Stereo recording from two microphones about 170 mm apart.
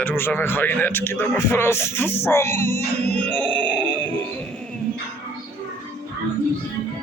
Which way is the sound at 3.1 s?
10° left (ahead or behind).